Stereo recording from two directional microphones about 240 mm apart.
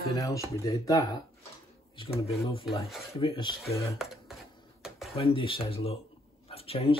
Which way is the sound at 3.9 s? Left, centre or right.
Centre.